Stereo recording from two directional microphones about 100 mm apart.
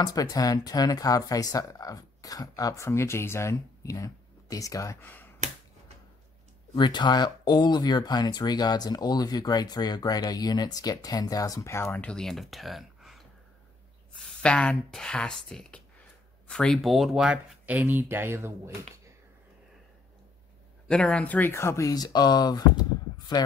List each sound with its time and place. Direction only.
0.0 s speech: 35° left (ahead or behind)
5.0 s finger snapping: 20° left (ahead or behind)
6.7 s speech: 50° left (ahead or behind); by 12.0 s 25° left (ahead or behind)
12.0 s speech: 10° left (ahead or behind)
17.6 s speech: 20° right (ahead or behind)
20.9 s speech: 10° left (ahead or behind); by 22.6 s 45° left (ahead or behind)
23.1 s a sound: 40° left (ahead or behind)